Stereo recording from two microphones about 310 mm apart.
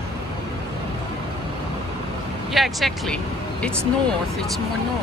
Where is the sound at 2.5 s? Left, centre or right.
Centre.